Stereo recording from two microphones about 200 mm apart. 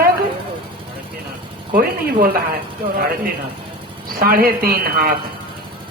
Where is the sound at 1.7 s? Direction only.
45° right (ahead or behind).